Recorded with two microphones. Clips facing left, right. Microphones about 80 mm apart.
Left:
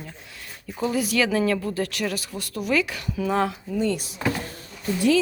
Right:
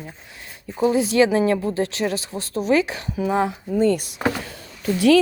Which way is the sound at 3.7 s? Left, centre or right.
Right.